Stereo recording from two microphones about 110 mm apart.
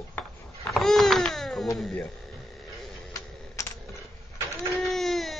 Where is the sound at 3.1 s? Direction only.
30° left (ahead or behind).